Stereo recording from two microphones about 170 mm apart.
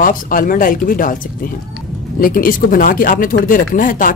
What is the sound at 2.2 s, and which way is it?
Speech, 55° left (ahead or behind).